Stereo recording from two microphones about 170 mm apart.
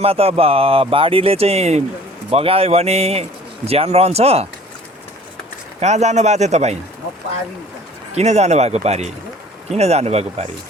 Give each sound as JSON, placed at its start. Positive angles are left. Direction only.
{"t": 0.0, "sound": "speech", "side_deg": -35}
{"t": 5.8, "sound": "speech", "side_deg": -40}
{"t": 8.1, "sound": "speech", "side_deg": -40}